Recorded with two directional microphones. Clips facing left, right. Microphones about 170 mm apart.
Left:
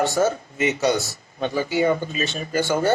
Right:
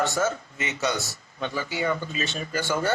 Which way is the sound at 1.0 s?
35° left (ahead or behind).